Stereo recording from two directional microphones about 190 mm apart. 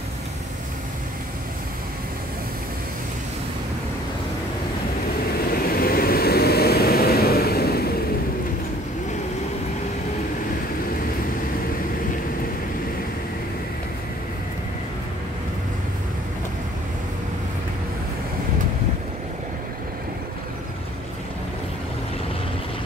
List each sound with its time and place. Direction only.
5.4 s vehicle: 50° left (ahead or behind)